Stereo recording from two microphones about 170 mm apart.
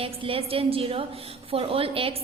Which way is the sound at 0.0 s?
35° right (ahead or behind).